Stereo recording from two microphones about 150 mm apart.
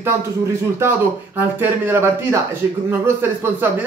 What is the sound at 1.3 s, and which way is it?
Speech, 15° right (ahead or behind).